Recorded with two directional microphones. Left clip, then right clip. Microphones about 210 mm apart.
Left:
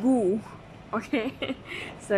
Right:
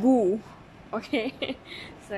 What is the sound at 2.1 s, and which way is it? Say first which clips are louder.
Speech: left 10 dB; 20° left (ahead or behind).